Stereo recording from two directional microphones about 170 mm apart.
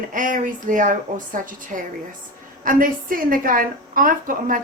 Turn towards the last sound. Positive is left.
turn(degrees=-55)  # may be behind; listen again after turning